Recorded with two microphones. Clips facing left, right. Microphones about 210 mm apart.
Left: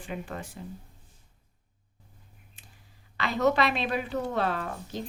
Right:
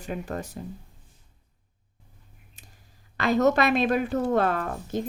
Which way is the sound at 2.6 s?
40° right (ahead or behind).